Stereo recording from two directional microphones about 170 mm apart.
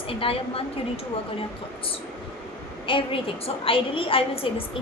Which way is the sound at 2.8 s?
30° left (ahead or behind).